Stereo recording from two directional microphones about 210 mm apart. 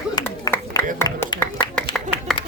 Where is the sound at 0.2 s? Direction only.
15° left (ahead or behind).